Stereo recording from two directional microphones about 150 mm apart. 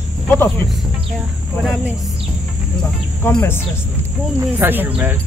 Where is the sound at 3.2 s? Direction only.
15° left (ahead or behind).